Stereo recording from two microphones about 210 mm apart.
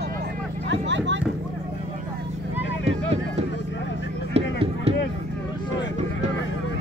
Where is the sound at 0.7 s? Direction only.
60° right (ahead or behind).